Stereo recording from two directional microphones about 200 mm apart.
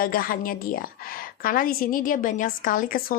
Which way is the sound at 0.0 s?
45° left (ahead or behind).